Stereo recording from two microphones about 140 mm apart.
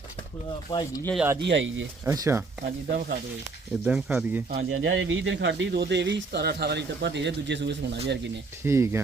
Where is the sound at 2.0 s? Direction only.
20° right (ahead or behind).